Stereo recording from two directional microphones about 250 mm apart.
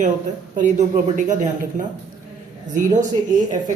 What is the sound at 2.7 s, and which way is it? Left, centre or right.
Speech, right.